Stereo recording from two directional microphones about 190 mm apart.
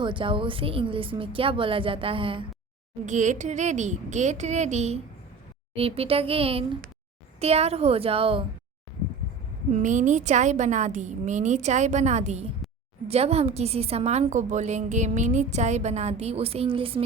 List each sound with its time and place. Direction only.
0.0 s speech: 25° right (ahead or behind)
3.1 s a woman's voice: 40° right (ahead or behind)
9.7 s a woman's voice: 40° right (ahead or behind)